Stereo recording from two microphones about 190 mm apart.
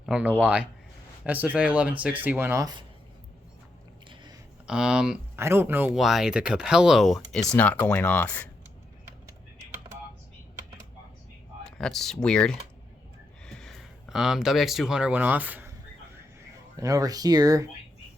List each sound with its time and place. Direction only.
0.0 s speech: 5° right (ahead or behind)
4.1 s a sound: 25° right (ahead or behind)
4.6 s speech: 5° right (ahead or behind)
11.6 s speech: centre (ahead or behind)
16.7 s speech: 20° right (ahead or behind)